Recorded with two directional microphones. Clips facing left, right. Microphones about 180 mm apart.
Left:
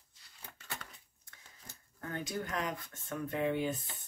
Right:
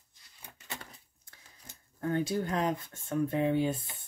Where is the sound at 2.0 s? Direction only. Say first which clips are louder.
Right 8 dB; 30° right (ahead or behind).